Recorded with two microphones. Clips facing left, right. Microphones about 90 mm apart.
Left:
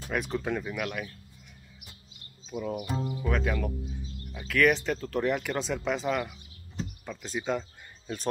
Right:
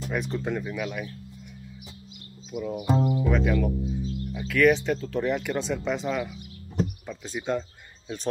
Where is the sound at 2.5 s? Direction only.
30° left (ahead or behind).